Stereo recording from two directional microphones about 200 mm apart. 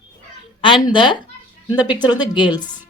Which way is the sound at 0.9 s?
25° left (ahead or behind).